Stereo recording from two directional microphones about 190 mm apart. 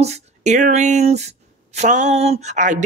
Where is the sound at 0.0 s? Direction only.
35° right (ahead or behind).